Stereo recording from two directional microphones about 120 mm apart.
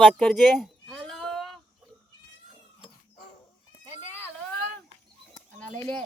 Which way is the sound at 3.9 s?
20° left (ahead or behind).